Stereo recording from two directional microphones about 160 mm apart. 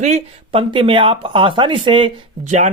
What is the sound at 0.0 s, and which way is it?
Speech, 40° right (ahead or behind).